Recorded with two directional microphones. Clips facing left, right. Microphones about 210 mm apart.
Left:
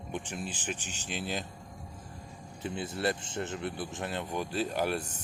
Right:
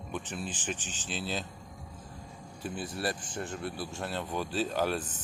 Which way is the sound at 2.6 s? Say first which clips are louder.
Left 2 dB; 25° left (ahead or behind).